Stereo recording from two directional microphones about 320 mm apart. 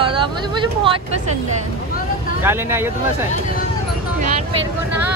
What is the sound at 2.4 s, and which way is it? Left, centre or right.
Speech, centre.